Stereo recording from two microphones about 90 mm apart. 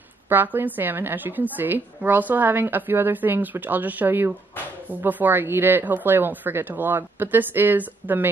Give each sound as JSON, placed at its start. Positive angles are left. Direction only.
{"t": 0.3, "sound": "speech", "side_deg": -20}